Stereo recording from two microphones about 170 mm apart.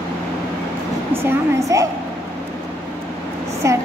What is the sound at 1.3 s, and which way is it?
Speech, 20° right (ahead or behind).